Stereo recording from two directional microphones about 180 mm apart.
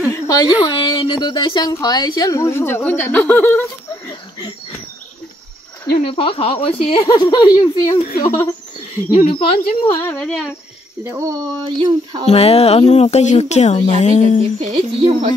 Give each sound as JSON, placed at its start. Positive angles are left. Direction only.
{"t": 0.1, "sound": "a woman's voice", "side_deg": 20}
{"t": 5.9, "sound": "speech", "side_deg": 35}
{"t": 9.1, "sound": "a woman's voice", "side_deg": 30}
{"t": 10.0, "sound": "speech", "side_deg": 5}
{"t": 11.1, "sound": "speech", "side_deg": -15}
{"t": 12.3, "sound": "speech", "side_deg": 35}
{"t": 14.6, "sound": "speech", "side_deg": -30}